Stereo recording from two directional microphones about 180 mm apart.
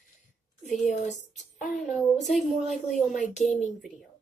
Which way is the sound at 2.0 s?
Centre (ahead or behind).